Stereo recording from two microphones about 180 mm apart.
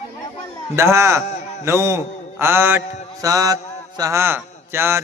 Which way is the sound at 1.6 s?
15° right (ahead or behind).